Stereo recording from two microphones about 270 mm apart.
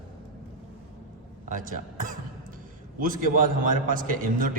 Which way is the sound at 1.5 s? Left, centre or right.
Right.